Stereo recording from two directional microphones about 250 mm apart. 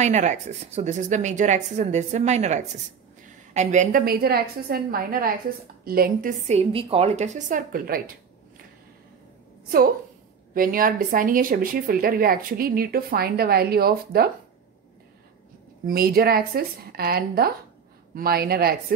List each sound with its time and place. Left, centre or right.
0.0 s a woman's voice: right
10.5 s speech: right
15.9 s speech: right